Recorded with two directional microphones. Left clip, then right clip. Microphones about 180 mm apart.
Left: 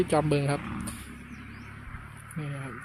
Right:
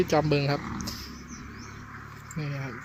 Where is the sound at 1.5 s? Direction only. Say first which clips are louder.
Right 2 dB; 50° left (ahead or behind).